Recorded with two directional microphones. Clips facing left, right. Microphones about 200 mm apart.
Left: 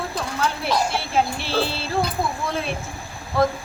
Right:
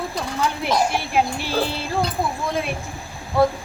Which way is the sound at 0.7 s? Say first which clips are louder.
Right 3 dB; 15° right (ahead or behind).